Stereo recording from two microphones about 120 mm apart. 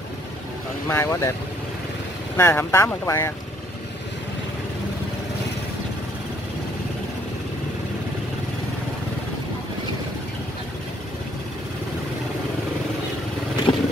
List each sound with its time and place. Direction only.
0.8 s speech: 20° left (ahead or behind)
2.3 s speech: 20° left (ahead or behind)
13.7 s vehicle: 40° left (ahead or behind)